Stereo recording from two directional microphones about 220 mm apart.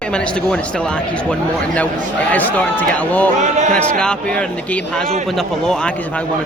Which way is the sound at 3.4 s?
35° right (ahead or behind).